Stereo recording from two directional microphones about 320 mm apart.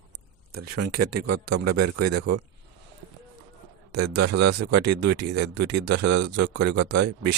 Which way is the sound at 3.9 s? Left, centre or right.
Right.